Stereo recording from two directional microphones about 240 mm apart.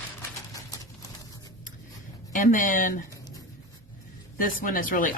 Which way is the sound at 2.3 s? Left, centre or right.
Left.